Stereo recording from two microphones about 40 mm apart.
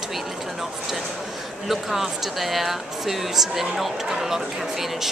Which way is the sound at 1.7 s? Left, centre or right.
Centre.